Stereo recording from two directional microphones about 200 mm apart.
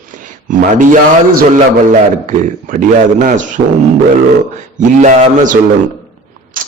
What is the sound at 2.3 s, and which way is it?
A man's voice, 40° right (ahead or behind).